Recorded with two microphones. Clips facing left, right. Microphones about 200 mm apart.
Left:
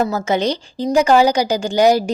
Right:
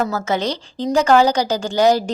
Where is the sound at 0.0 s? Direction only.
15° left (ahead or behind).